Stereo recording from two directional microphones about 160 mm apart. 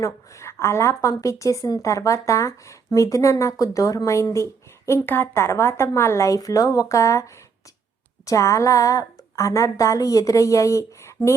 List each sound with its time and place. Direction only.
0.0 s a woman's voice: 20° left (ahead or behind)